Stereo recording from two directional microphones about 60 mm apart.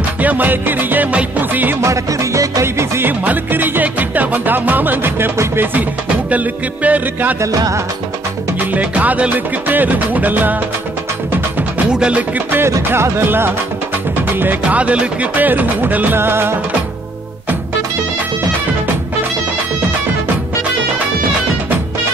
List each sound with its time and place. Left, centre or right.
0.2 s music: right
1.8 s music: right
2.6 s music: right
3.1 s music: right
6.3 s music: right
7.5 s music: right
8.5 s music: right
11.9 s music: centre
12.4 s music: right
14.8 s music: right
16.2 s music: right